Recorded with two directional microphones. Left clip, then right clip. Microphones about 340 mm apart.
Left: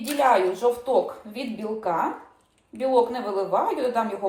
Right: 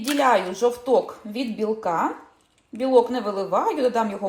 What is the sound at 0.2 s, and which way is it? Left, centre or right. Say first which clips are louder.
A woman's voice: even; right.